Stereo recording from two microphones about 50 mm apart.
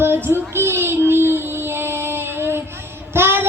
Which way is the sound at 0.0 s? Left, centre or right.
Right.